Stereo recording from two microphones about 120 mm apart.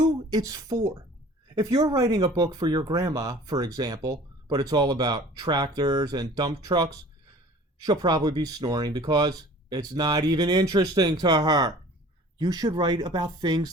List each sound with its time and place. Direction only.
0.0 s a woman's voice: 35° right (ahead or behind)